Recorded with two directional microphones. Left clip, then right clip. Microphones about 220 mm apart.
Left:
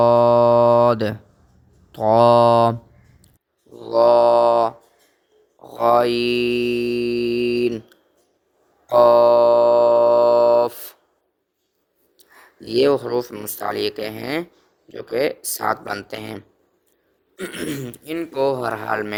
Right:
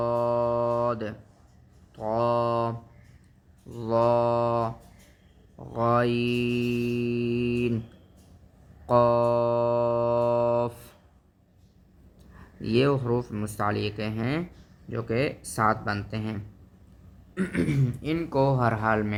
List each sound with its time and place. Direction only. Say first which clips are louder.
0.0 s music: left 12 dB; 35° left (ahead or behind)
1.9 s speech: left 12 dB; 35° left (ahead or behind)
3.9 s mantra: left 9 dB; 35° left (ahead or behind)
5.7 s mantra: left 8 dB; 35° left (ahead or behind)
8.9 s music: left 9 dB; 35° left (ahead or behind)
12.7 s speech: left 7 dB; 30° left (ahead or behind)
17.4 s speech: left 2 dB; 30° left (ahead or behind)